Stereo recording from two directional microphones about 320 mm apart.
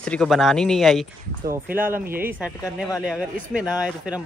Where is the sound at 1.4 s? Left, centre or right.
Right.